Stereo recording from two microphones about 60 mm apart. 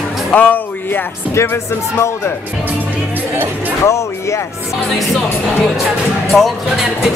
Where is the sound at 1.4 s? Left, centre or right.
Left.